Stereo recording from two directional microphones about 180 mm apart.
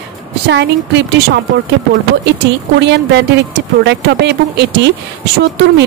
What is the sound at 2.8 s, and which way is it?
Speech, 70° right (ahead or behind).